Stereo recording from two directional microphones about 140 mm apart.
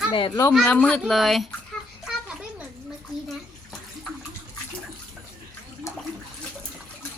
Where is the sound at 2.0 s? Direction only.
5° right (ahead or behind).